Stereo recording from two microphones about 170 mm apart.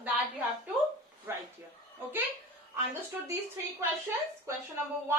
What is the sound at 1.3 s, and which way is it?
Speech, 15° right (ahead or behind).